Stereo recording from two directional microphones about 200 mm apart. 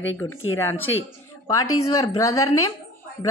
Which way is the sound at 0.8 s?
80° left.